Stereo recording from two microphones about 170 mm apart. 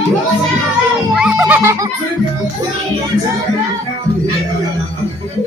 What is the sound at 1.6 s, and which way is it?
Speech, 15° right (ahead or behind).